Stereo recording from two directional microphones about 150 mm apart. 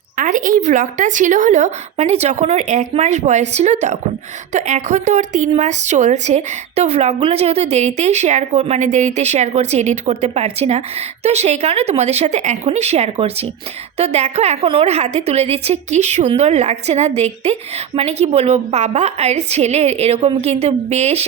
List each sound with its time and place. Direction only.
0.2 s a woman's voice: 60° right (ahead or behind); by 21.2 s 45° right (ahead or behind)